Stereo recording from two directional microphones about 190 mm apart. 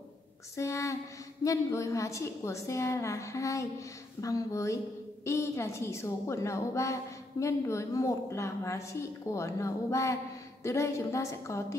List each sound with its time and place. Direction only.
0.6 s a woman's voice: 15° left (ahead or behind)